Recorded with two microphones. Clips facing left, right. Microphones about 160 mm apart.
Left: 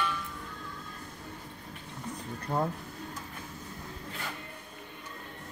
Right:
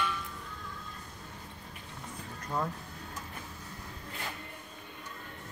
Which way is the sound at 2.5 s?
30° left (ahead or behind).